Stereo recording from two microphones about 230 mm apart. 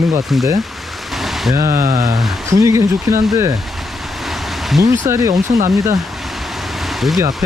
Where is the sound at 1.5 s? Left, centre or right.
Centre.